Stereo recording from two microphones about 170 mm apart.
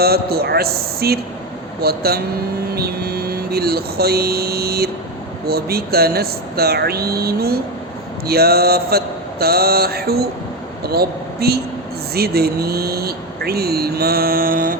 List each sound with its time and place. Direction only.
0.0 s mantra: 65° right (ahead or behind)
2.6 s speech: 65° right (ahead or behind)
8.3 s mantra: 65° right (ahead or behind)
10.8 s speech: 65° right (ahead or behind)